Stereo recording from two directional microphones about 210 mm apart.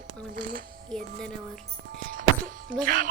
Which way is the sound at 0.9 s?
5° left (ahead or behind).